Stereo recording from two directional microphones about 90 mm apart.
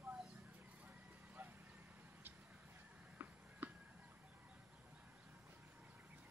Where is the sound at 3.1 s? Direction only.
20° right (ahead or behind).